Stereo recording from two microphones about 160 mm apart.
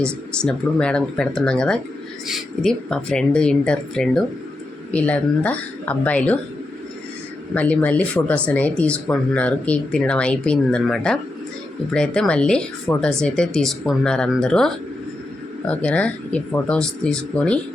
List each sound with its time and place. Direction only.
0.4 s speech: 5° left (ahead or behind)
7.5 s speech: 10° left (ahead or behind)